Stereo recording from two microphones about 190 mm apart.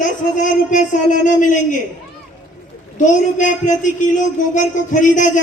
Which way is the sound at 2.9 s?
40° left (ahead or behind).